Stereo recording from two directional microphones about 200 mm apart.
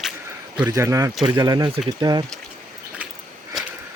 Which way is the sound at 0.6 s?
15° right (ahead or behind).